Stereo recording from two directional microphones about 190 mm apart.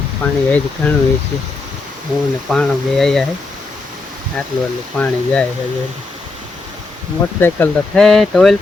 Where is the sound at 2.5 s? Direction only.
Centre (ahead or behind).